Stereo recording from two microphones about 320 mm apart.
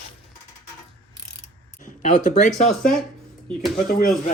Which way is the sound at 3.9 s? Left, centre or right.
Left.